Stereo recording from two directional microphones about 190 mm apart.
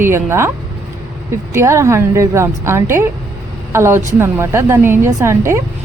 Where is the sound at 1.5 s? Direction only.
15° right (ahead or behind).